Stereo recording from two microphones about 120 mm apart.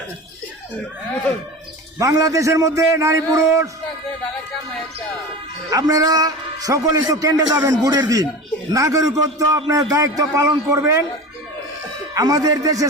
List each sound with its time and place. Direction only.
2.0 s a man's voice: 30° right (ahead or behind)
5.7 s a man's voice: 30° right (ahead or behind)
12.1 s a man's voice: 30° right (ahead or behind)